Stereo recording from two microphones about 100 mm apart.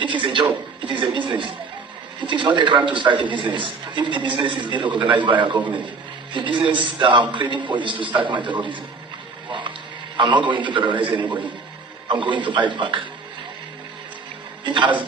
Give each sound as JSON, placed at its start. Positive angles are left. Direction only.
{"t": 0.0, "sound": "a man's voice", "side_deg": -55}
{"t": 5.5, "sound": "a man's voice", "side_deg": -15}
{"t": 6.3, "sound": "a man's voice", "side_deg": -55}
{"t": 9.5, "sound": "a sound", "side_deg": -55}
{"t": 10.2, "sound": "a man's voice", "side_deg": -50}
{"t": 14.6, "sound": "a man's voice", "side_deg": -55}